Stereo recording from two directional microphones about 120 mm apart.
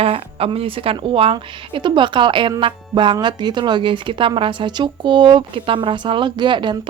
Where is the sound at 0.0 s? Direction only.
55° right (ahead or behind).